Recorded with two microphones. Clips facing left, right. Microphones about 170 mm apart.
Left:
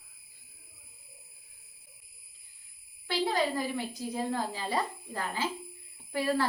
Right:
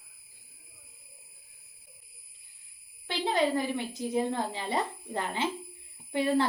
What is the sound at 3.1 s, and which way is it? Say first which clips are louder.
A woman's voice: right 1 dB; 20° right (ahead or behind).